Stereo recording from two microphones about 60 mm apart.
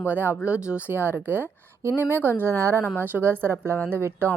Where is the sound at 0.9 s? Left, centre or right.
Right.